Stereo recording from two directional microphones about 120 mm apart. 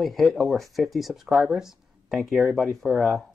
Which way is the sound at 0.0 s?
Centre (ahead or behind).